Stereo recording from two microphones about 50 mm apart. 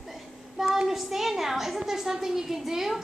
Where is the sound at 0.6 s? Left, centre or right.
Centre.